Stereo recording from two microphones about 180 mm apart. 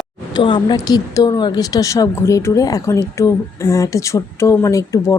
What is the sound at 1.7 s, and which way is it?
Speech, 20° left (ahead or behind).